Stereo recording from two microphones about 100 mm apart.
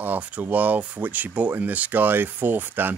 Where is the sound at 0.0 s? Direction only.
15° right (ahead or behind).